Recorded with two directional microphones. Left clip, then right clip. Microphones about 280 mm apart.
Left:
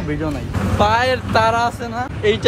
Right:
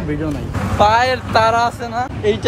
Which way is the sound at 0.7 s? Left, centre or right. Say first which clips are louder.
Right 3 dB; centre.